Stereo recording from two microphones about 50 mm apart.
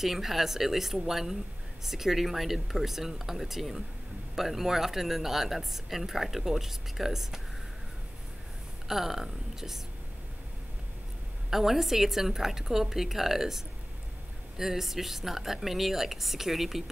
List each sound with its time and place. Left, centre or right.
0.0 s a woman's voice: centre
8.8 s a woman's voice: centre
11.5 s a woman's voice: centre